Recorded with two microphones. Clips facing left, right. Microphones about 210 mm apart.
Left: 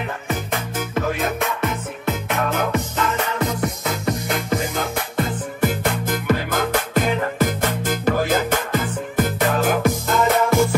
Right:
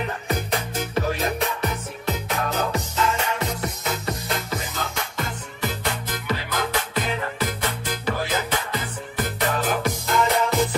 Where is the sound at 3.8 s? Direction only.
50° left (ahead or behind).